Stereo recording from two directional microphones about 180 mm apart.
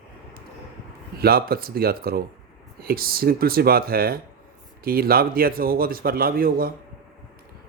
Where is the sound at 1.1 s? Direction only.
60° right (ahead or behind).